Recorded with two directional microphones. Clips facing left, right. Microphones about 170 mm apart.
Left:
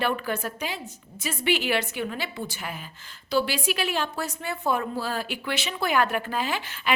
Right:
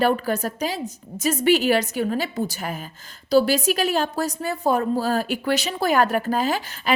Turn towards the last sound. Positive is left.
turn(degrees=-40)  # may be behind; listen again after turning